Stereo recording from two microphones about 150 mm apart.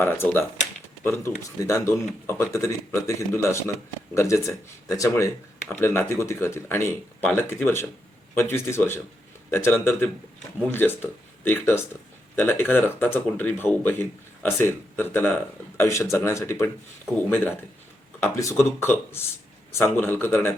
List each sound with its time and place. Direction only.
0.0 s speech: 15° left (ahead or behind)